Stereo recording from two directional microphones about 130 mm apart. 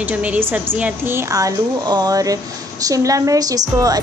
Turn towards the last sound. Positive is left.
turn(degrees=-30)  # may be behind; listen again after turning